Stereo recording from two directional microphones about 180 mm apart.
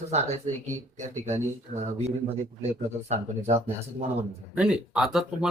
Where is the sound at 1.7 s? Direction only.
40° right (ahead or behind).